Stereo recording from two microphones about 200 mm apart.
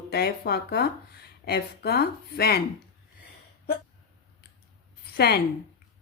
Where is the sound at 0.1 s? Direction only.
50° left (ahead or behind).